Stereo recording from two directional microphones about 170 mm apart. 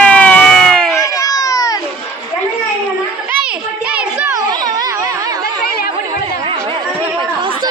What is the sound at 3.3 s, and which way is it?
Children playing, 10° right (ahead or behind).